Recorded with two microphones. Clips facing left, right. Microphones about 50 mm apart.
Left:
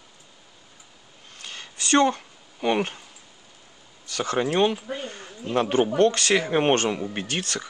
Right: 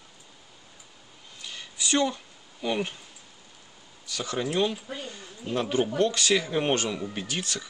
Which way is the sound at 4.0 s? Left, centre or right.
Left.